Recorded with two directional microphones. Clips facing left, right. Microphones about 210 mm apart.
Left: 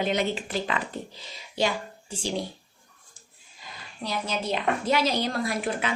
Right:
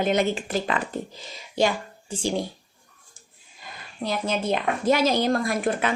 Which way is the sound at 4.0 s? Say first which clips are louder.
Right 4 dB; 55° right (ahead or behind).